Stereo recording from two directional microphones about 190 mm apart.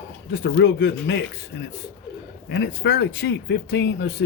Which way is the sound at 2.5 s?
60° left (ahead or behind).